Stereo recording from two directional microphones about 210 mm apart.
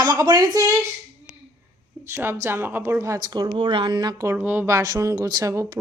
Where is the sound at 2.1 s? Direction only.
10° right (ahead or behind).